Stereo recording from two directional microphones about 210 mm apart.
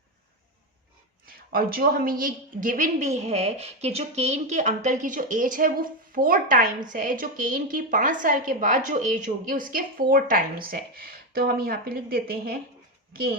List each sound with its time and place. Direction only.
1.5 s a woman's voice: 45° right (ahead or behind)